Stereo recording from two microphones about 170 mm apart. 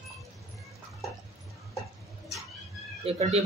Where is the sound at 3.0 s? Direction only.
40° right (ahead or behind).